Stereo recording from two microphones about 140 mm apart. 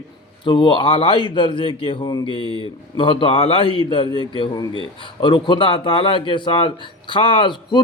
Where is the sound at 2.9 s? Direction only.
35° left (ahead or behind).